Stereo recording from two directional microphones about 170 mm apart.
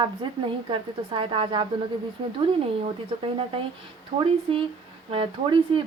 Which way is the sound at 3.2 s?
35° right (ahead or behind).